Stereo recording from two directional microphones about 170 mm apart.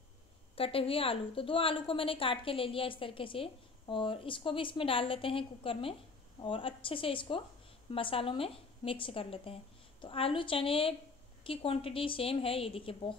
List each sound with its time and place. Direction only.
0.6 s a woman's voice: 35° left (ahead or behind)